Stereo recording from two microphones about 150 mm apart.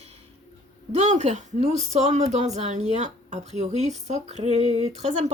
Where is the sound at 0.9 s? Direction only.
50° right (ahead or behind).